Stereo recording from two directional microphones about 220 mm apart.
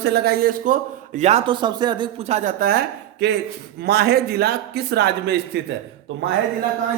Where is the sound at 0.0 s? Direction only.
45° right (ahead or behind).